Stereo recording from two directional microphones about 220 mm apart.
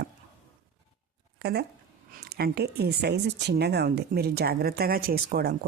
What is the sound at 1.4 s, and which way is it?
A woman's voice, 45° right (ahead or behind).